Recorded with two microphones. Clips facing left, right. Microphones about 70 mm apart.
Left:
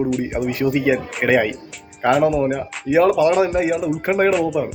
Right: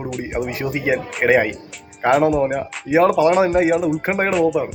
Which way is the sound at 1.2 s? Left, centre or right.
Right.